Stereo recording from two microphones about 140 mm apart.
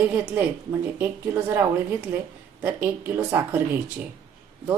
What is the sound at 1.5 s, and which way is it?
Speech, 15° right (ahead or behind).